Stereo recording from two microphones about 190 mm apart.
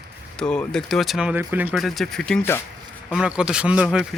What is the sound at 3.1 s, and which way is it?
Speech, 5° right (ahead or behind).